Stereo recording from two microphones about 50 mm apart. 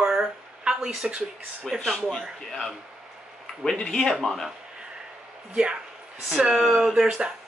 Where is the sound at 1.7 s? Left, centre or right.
Centre.